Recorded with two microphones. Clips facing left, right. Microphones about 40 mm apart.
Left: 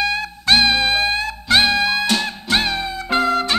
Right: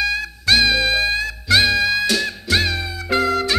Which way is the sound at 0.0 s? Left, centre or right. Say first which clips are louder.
Even; left.